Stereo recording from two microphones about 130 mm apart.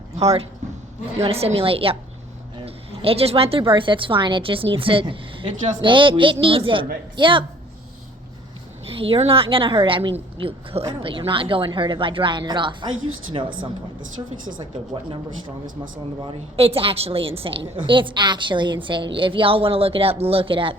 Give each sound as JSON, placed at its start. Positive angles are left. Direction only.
{"t": 0.2, "sound": "a woman's voice", "side_deg": -55}
{"t": 8.9, "sound": "a woman's voice", "side_deg": -45}
{"t": 16.2, "sound": "a woman's voice", "side_deg": -50}